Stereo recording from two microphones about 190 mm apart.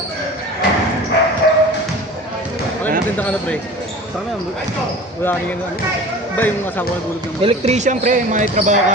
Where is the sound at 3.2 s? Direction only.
5° left (ahead or behind).